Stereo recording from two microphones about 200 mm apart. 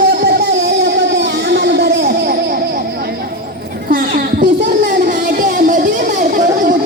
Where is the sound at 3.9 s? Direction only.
45° right (ahead or behind).